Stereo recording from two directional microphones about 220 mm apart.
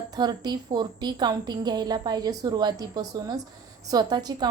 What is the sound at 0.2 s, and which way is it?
A woman's voice, 20° right (ahead or behind).